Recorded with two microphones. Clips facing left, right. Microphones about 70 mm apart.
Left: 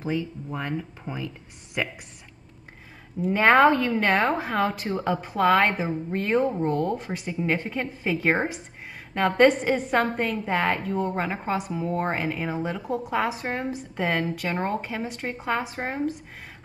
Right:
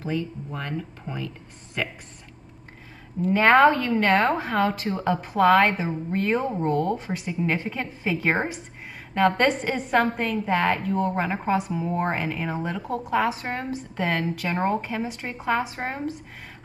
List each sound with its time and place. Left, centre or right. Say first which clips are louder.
0.0 s speech: even; centre
3.2 s a woman's voice: right 1 dB; centre